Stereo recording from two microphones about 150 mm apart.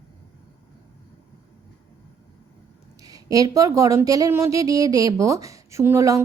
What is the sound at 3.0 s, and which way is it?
Speech, 25° right (ahead or behind).